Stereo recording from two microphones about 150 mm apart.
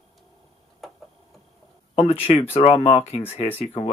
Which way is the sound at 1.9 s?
40° left (ahead or behind).